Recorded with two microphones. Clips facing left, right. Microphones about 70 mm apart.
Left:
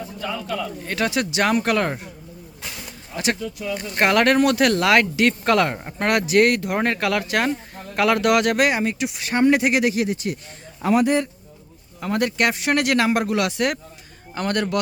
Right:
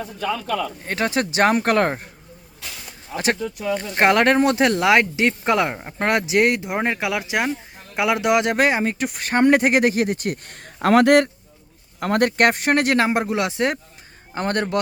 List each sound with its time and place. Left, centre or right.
0.2 s speech: right
0.9 s speech: right
3.2 s speech: right; by 5.9 s centre
6.0 s speech: right
10.8 s a man's voice: right
11.9 s speech: right